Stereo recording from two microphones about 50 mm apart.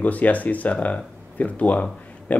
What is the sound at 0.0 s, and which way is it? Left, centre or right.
Speech, left.